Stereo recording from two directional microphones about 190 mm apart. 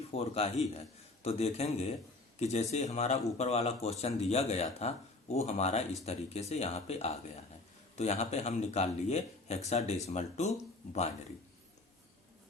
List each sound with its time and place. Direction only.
0.1 s speech: 30° left (ahead or behind)